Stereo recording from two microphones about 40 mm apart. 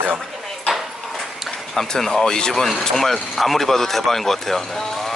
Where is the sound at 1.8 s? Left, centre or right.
Centre.